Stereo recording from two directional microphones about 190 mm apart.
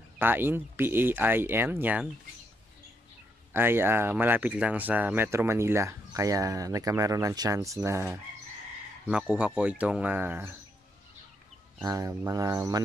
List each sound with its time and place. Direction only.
0.2 s speech: 10° right (ahead or behind)
3.5 s speech: 10° right (ahead or behind)
11.8 s speech: 15° right (ahead or behind)